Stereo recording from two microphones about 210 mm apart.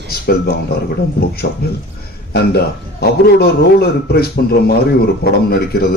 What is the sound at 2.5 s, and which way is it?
A man's voice, 50° left (ahead or behind).